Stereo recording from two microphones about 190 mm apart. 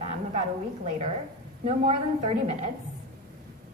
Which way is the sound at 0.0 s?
30° right (ahead or behind).